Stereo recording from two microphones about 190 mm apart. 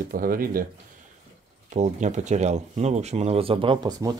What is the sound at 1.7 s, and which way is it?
Speech, 40° right (ahead or behind).